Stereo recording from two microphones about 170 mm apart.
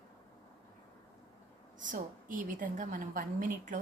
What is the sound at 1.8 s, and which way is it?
A woman's voice, 50° right (ahead or behind).